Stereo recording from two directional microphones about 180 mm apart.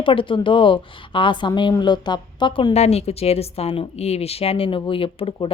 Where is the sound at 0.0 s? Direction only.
30° left (ahead or behind).